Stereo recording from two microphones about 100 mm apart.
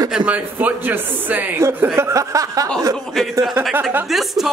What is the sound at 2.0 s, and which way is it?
Chuckle, 30° right (ahead or behind).